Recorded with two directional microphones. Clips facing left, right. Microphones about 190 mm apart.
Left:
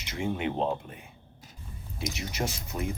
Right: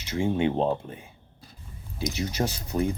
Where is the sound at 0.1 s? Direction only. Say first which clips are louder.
Right 6 dB; 30° right (ahead or behind).